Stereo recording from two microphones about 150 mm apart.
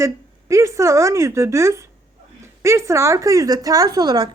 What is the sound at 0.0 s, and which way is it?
Speech, 20° right (ahead or behind).